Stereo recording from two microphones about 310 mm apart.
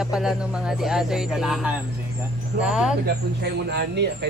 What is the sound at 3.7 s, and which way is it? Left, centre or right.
Speech, right.